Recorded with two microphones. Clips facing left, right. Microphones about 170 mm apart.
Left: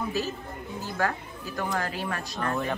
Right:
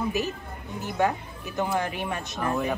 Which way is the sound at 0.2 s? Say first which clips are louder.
Right 1 dB; 20° right (ahead or behind).